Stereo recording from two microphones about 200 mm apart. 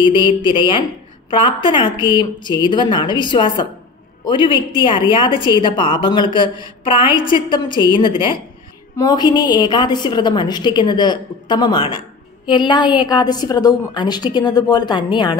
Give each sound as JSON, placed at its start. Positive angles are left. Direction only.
{"t": 0.0, "sound": "a woman's voice", "side_deg": 25}